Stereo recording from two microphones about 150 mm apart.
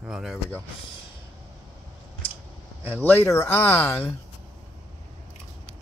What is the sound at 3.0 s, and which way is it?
Speech, 15° left (ahead or behind).